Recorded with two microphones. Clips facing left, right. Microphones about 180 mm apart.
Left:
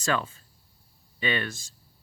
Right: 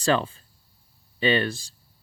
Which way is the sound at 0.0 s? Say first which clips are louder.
Right 5 dB; 30° right (ahead or behind).